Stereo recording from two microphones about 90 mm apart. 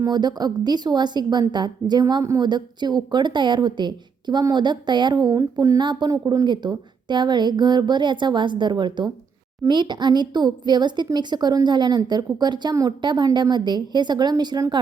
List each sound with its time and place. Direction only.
0.0 s a woman's voice: 55° right (ahead or behind)